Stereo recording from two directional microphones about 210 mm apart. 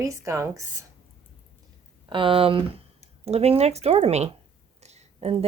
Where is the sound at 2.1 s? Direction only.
25° right (ahead or behind).